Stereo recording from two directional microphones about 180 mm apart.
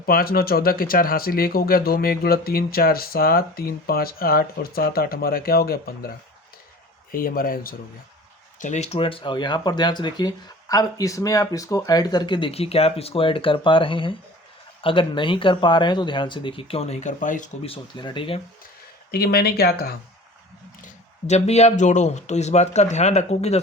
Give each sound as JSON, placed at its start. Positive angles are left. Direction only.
{"t": 0.0, "sound": "speech", "side_deg": 55}
{"t": 7.1, "sound": "speech", "side_deg": 55}
{"t": 8.5, "sound": "speech", "side_deg": 40}
{"t": 17.7, "sound": "speech", "side_deg": 25}
{"t": 19.1, "sound": "speech", "side_deg": 60}
{"t": 20.8, "sound": "speech", "side_deg": 40}